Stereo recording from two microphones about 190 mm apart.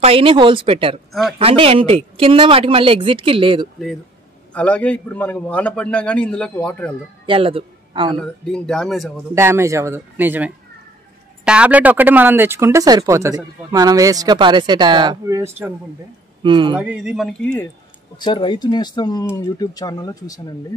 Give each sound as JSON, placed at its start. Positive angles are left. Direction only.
{"t": 0.0, "sound": "speech", "side_deg": -30}
{"t": 4.6, "sound": "a man's voice", "side_deg": 5}
{"t": 7.2, "sound": "a man's voice", "side_deg": -30}
{"t": 8.2, "sound": "speech", "side_deg": 5}
{"t": 9.3, "sound": "speech", "side_deg": -15}
{"t": 16.4, "sound": "speech", "side_deg": -25}
{"t": 16.7, "sound": "speech", "side_deg": -5}
{"t": 18.1, "sound": "speech", "side_deg": 25}